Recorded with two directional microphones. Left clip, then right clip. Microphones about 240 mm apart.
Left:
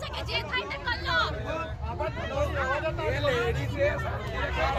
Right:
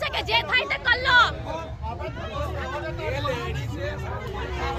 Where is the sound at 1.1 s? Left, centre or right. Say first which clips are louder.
Right 9 dB; centre.